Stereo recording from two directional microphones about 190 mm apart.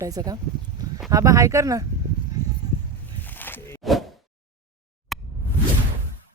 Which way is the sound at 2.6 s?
20° right (ahead or behind).